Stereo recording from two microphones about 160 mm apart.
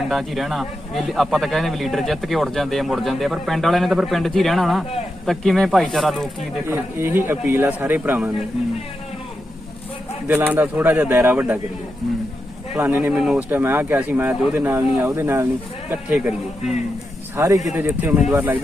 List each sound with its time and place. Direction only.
0.1 s a man's voice: centre (ahead or behind)
6.7 s speech: 15° right (ahead or behind)
10.2 s speech: 10° right (ahead or behind)
12.7 s speech: 10° right (ahead or behind)